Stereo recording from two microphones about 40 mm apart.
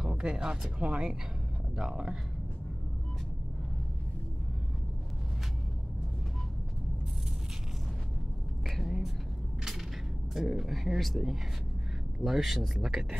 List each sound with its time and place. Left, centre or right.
0.0 s speech: right
8.6 s a sound: centre
10.3 s speech: centre